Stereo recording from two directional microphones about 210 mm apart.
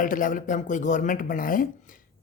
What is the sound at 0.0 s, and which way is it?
Speech, 40° left (ahead or behind).